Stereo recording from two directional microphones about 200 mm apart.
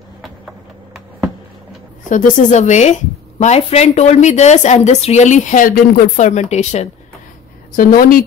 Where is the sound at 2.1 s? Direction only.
40° left (ahead or behind).